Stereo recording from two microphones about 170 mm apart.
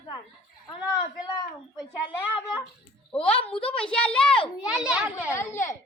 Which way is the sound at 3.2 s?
5° left (ahead or behind).